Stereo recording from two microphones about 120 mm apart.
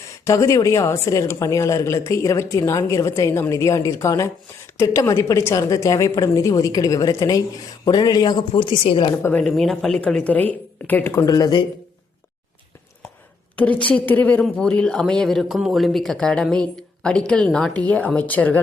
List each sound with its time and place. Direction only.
0.3 s a woman's voice: 25° left (ahead or behind); by 9.1 s 45° left (ahead or behind)
9.1 s speech: 15° left (ahead or behind)
9.4 s speech: 5° left (ahead or behind)
11.1 s a woman's voice: 25° left (ahead or behind)
13.6 s speech: 10° left (ahead or behind)